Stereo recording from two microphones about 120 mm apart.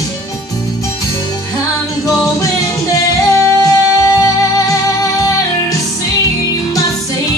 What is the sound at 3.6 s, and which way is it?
Music, 30° left (ahead or behind).